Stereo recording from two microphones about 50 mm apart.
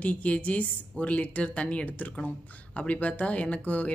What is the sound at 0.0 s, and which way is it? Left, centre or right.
Speech, left.